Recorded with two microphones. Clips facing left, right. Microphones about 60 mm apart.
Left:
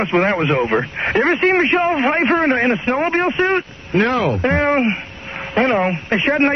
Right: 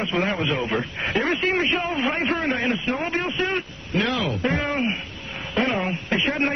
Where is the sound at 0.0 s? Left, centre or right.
Left.